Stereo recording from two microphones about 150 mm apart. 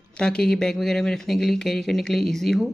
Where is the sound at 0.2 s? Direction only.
5° left (ahead or behind).